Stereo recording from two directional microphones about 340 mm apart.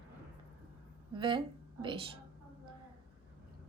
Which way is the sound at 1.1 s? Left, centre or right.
Centre.